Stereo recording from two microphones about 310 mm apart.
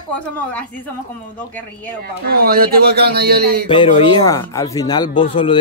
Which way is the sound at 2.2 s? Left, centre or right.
Right.